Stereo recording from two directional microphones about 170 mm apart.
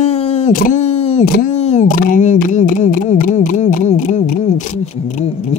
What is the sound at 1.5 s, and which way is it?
A man's voice, 40° left (ahead or behind).